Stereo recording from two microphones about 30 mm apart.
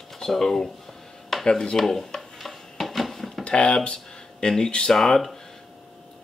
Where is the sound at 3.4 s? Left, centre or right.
Left.